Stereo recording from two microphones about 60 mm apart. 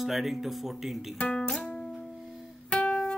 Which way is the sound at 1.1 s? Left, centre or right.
Centre.